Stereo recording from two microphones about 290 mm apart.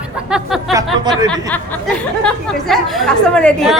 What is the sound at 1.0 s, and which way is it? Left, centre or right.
Speech, centre.